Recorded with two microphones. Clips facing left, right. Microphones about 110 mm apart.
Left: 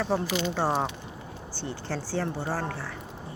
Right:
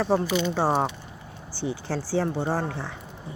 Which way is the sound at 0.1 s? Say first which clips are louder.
Right 4 dB; 10° right (ahead or behind).